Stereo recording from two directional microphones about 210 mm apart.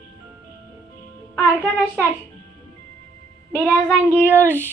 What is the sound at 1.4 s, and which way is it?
Child singing, 5° left (ahead or behind).